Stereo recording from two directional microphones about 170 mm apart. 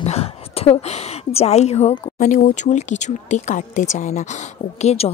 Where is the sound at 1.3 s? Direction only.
40° left (ahead or behind).